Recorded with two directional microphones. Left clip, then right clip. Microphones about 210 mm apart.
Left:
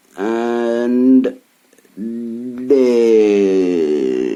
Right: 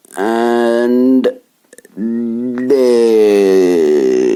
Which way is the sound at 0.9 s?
25° right (ahead or behind).